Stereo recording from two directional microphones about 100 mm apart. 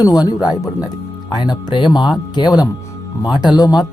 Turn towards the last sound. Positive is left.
turn(degrees=45)  # may be behind; listen again after turning